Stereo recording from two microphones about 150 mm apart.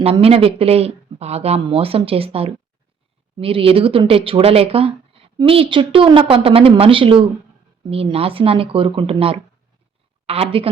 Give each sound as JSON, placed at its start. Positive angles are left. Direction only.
{"t": 0.0, "sound": "speech", "side_deg": -40}